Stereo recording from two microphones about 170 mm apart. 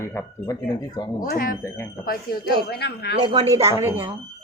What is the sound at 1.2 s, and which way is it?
Speech, 60° left (ahead or behind).